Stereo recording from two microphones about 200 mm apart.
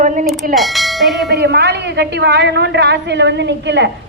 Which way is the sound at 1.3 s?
55° right (ahead or behind).